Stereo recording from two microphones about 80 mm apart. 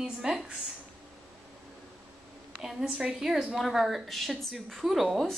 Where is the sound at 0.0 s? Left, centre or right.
Centre.